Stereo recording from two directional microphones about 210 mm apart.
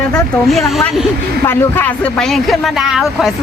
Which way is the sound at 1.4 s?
10° left (ahead or behind).